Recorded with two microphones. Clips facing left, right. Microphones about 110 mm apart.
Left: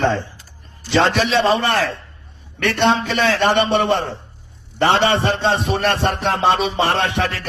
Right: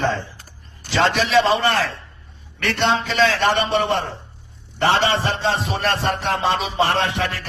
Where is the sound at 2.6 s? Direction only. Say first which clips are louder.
Left 3 dB; 50° left (ahead or behind).